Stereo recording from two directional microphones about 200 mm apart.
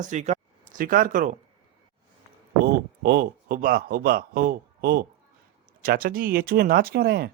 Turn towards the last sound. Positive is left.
turn(degrees=-50)  # may be behind; listen again after turning